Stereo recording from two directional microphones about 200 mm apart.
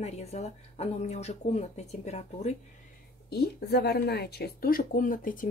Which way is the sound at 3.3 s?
50° left (ahead or behind).